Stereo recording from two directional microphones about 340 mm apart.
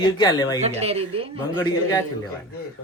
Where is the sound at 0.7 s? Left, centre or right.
Centre.